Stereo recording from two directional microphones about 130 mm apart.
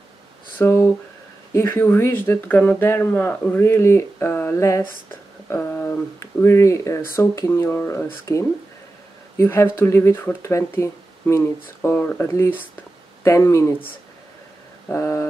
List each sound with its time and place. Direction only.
0.6 s speech: 20° left (ahead or behind)
9.4 s speech: 20° left (ahead or behind)
14.9 s speech: 20° left (ahead or behind)